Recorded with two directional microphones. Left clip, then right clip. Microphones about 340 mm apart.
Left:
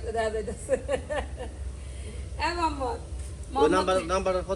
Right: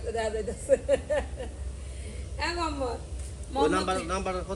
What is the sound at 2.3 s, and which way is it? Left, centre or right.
Speech, centre.